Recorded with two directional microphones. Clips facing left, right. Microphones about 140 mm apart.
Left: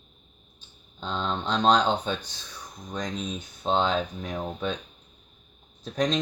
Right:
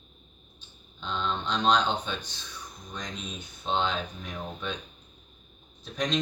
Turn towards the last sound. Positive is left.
turn(degrees=40)  # may be behind; listen again after turning